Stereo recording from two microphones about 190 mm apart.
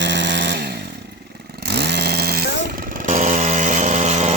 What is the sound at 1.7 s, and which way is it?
Chainsaw, 60° right (ahead or behind).